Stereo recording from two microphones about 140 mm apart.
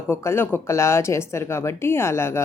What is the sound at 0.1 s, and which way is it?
Speech, 20° left (ahead or behind).